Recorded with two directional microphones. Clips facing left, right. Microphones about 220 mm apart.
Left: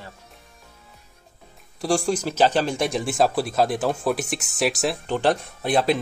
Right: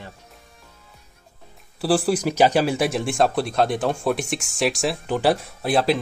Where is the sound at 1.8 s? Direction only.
5° right (ahead or behind).